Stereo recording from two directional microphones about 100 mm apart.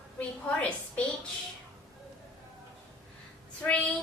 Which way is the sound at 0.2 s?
10° left (ahead or behind).